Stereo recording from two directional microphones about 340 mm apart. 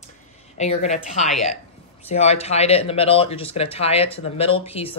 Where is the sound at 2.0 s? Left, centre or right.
Centre.